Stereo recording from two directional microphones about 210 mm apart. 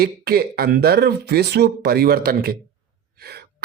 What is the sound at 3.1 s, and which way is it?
Gasp, 50° right (ahead or behind).